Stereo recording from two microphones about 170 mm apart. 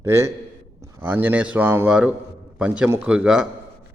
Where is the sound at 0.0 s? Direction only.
15° right (ahead or behind).